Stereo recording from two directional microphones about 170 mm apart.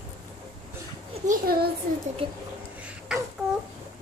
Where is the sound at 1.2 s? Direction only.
60° right (ahead or behind).